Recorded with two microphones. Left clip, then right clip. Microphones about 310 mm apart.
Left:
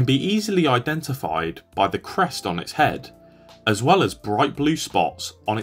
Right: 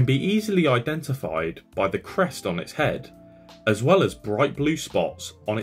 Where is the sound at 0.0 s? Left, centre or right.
Centre.